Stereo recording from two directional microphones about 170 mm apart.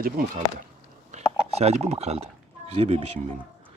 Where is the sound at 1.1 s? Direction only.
40° right (ahead or behind).